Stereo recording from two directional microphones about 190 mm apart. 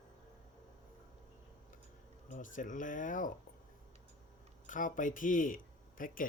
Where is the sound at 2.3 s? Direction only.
45° left (ahead or behind).